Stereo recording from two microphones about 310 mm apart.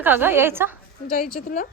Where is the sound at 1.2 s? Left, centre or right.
Left.